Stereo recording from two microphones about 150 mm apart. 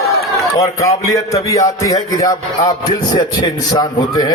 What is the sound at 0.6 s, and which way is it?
A man's voice, 20° left (ahead or behind).